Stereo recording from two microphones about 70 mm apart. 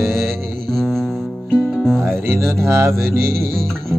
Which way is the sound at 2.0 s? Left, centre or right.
Right.